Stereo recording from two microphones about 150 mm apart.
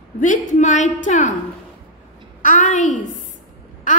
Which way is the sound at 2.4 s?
60° left (ahead or behind).